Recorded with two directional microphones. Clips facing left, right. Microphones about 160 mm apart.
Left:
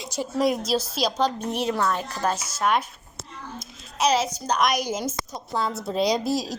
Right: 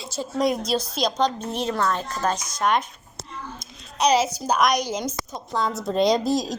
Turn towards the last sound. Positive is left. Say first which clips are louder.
# right 3 dB
turn(degrees=5)  # may be behind; listen again after turning